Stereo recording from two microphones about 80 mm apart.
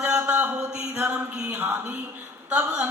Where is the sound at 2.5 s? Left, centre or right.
Centre.